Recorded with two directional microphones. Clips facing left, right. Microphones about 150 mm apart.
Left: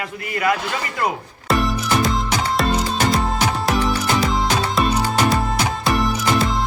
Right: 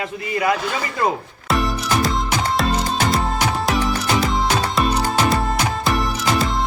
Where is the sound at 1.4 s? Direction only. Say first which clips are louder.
Left 1 dB; centre (ahead or behind).